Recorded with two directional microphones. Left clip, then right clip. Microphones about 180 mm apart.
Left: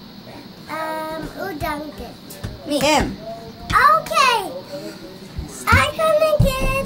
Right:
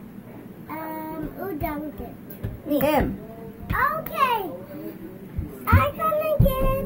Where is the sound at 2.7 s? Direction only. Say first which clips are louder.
Left 4 dB; centre (ahead or behind).